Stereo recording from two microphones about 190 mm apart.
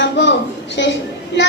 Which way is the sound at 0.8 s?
70° left (ahead or behind).